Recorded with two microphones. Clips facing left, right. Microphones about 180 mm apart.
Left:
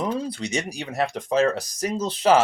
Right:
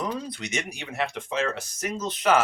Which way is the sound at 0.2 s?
30° left (ahead or behind).